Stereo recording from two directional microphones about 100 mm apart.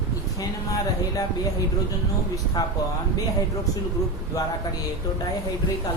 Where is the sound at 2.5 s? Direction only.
45° left (ahead or behind).